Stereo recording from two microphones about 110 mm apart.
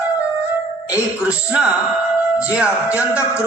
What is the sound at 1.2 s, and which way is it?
A man's voice, 10° right (ahead or behind).